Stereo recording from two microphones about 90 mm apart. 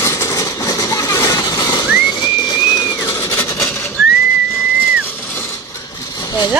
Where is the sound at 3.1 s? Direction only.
30° left (ahead or behind).